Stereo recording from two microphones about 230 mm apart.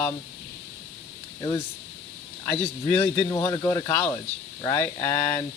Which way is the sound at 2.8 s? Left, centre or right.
Centre.